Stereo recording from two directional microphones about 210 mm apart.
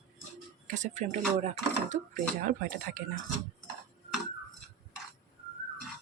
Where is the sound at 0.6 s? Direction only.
35° right (ahead or behind).